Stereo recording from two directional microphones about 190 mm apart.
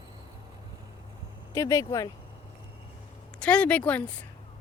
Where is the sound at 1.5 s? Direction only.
20° left (ahead or behind).